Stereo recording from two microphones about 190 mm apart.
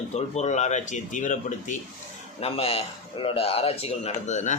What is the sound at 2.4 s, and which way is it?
Speech, 30° left (ahead or behind).